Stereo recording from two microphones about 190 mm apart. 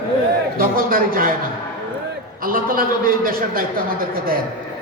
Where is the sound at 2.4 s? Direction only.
50° right (ahead or behind).